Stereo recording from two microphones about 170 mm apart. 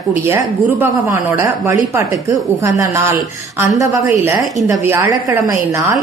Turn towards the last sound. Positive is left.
turn(degrees=-10)  # may be behind; listen again after turning